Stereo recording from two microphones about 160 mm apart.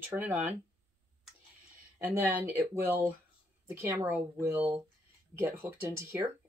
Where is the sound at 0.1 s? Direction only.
10° right (ahead or behind).